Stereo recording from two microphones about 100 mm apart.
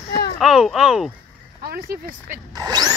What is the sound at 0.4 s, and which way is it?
Speech, 5° right (ahead or behind).